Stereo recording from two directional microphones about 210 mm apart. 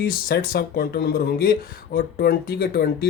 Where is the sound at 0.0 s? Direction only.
45° left (ahead or behind).